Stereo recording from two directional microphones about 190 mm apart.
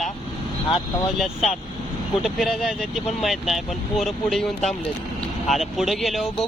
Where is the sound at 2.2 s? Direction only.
Centre (ahead or behind).